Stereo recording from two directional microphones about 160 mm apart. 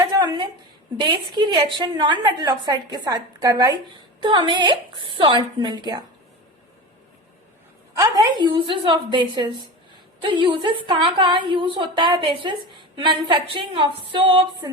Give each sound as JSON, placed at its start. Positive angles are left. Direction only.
{"t": 0.0, "sound": "a sound", "side_deg": -25}
{"t": 0.9, "sound": "a woman's voice", "side_deg": -25}
{"t": 7.9, "sound": "a woman's voice", "side_deg": -20}